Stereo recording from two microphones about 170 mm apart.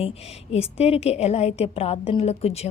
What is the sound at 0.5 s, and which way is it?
A woman's voice, 35° left (ahead or behind).